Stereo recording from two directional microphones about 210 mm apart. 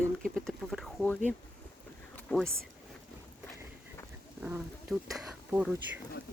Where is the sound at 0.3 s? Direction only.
Centre (ahead or behind).